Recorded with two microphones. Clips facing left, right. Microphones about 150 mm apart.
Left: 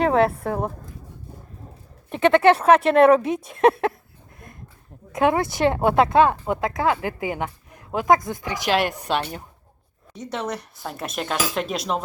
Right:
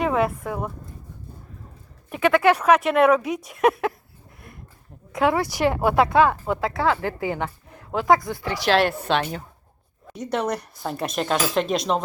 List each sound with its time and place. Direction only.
0.0 s a woman's voice: 35° left (ahead or behind)
2.0 s speech: 25° left (ahead or behind)
5.1 s speech: 20° left (ahead or behind)
10.2 s speech: centre (ahead or behind)